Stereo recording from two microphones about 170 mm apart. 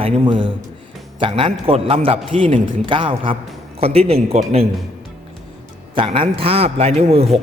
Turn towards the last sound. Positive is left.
turn(degrees=-35)  # may be behind; listen again after turning